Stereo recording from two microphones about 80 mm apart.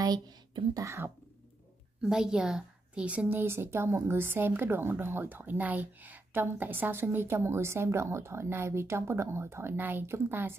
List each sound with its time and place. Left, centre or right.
0.0 s speech: right
0.8 s speech: right
2.0 s a woman's voice: centre; by 10.5 s right